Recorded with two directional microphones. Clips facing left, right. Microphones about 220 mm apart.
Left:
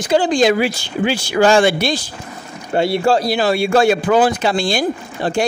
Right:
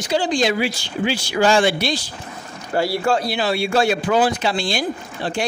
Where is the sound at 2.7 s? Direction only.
25° left (ahead or behind).